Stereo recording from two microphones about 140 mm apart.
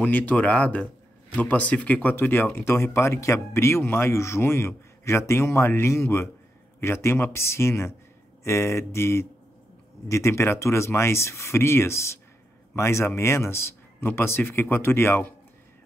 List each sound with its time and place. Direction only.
0.0 s speech: 10° left (ahead or behind)